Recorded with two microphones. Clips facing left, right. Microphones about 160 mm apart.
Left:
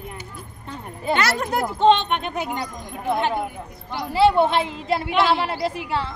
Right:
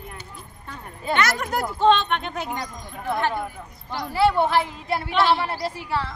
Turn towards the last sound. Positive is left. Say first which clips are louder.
# left 2 dB
turn(degrees=20)  # may be behind; listen again after turning